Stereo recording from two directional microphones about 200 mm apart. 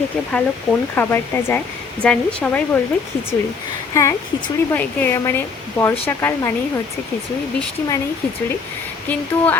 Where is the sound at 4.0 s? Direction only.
15° left (ahead or behind).